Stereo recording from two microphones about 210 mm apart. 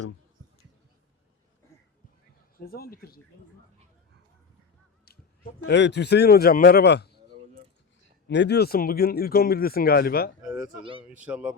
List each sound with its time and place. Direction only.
2.6 s speech: 45° left (ahead or behind)
5.0 s a man's voice: 50° left (ahead or behind)
8.3 s speech: 55° left (ahead or behind)
10.4 s a sound: 5° right (ahead or behind)
11.1 s speech: 5° right (ahead or behind)